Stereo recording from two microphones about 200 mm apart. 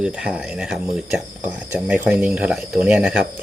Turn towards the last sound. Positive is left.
turn(degrees=-5)  # may be behind; listen again after turning